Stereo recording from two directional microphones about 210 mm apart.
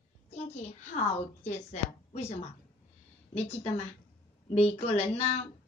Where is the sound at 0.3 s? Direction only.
30° left (ahead or behind).